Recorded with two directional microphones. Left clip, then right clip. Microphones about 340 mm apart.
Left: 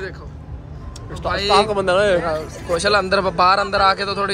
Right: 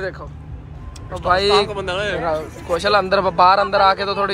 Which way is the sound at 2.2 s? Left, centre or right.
Centre.